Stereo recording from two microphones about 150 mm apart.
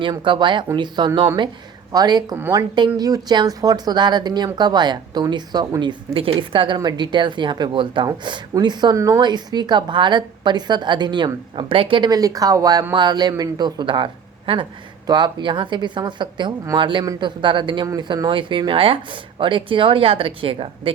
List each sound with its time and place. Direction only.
0.0 s a man's voice: 30° right (ahead or behind)